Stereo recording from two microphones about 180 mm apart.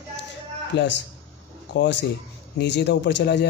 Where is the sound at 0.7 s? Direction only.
75° left (ahead or behind).